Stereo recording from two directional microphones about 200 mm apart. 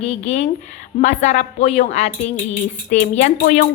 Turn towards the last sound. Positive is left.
turn(degrees=40)  # may be behind; listen again after turning